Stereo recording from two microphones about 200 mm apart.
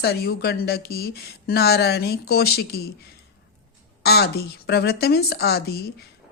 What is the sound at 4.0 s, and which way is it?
Speech, 55° left (ahead or behind).